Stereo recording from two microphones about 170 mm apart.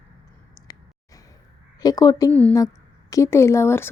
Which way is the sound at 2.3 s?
10° left (ahead or behind).